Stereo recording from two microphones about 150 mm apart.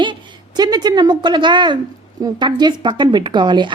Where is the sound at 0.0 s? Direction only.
30° right (ahead or behind).